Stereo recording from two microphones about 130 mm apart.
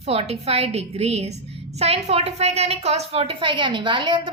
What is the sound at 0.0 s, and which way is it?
A woman's voice, 50° right (ahead or behind).